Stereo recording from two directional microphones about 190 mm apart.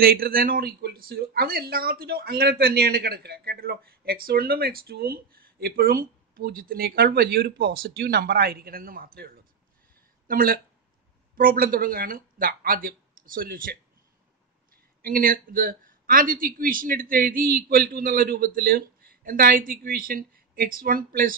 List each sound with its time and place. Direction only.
0.0 s speech: 50° right (ahead or behind)
15.0 s speech: 50° right (ahead or behind)